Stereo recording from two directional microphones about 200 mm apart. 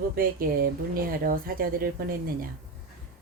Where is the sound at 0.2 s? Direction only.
45° right (ahead or behind).